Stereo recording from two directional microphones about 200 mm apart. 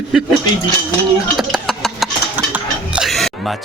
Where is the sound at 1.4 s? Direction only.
Centre (ahead or behind).